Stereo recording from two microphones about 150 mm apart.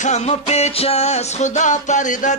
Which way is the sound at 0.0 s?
50° left (ahead or behind).